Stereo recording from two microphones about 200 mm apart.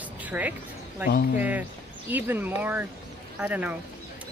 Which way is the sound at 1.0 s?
50° left (ahead or behind).